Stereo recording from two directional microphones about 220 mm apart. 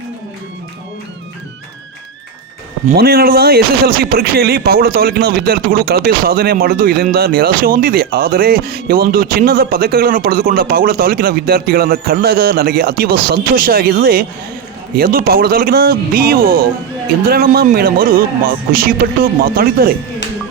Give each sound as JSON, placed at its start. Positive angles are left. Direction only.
{"t": 2.9, "sound": "speech", "side_deg": -45}